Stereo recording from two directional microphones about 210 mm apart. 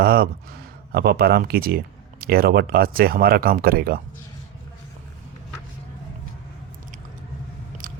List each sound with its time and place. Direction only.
0.0 s speech: 45° right (ahead or behind)